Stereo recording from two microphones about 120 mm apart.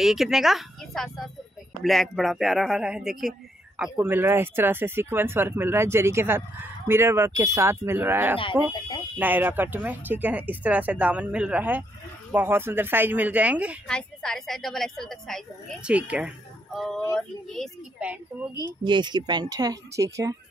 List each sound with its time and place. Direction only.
0.0 s a man's voice: 5° right (ahead or behind)
3.9 s speech: 20° right (ahead or behind)
13.8 s a man's voice: 5° left (ahead or behind)
15.8 s speech: 10° right (ahead or behind)
16.7 s a man's voice: centre (ahead or behind)
17.9 s speech: 10° right (ahead or behind)
18.9 s speech: 40° right (ahead or behind)